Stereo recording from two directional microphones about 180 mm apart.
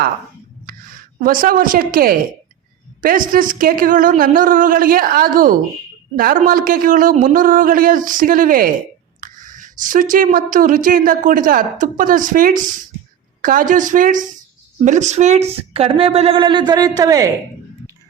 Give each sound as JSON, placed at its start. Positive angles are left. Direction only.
{"t": 0.7, "sound": "a woman's voice", "side_deg": -50}